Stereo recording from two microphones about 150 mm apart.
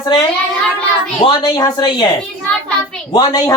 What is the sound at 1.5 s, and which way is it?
Speech, 25° left (ahead or behind).